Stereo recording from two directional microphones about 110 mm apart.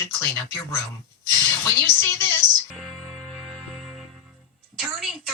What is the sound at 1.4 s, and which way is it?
Speech, 30° left (ahead or behind).